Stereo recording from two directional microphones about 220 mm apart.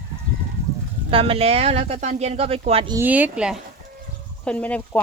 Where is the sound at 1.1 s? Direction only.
25° right (ahead or behind).